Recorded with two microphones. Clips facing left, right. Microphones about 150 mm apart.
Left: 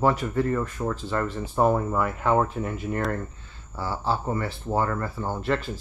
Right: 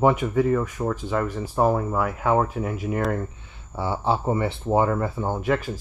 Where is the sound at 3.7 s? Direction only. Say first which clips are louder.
Right 3 dB; 20° right (ahead or behind).